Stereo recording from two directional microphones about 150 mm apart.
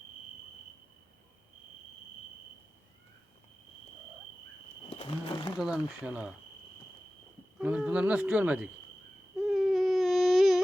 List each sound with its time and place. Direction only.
4.9 s roaring cats: 40° left (ahead or behind)
5.5 s speech: 5° right (ahead or behind)
7.6 s speech: 10° right (ahead or behind)
9.4 s baby cry: centre (ahead or behind)